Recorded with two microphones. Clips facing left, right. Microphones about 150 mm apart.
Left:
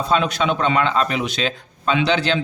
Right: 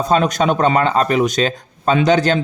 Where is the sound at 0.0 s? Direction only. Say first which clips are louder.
Right 4 dB; 45° right (ahead or behind).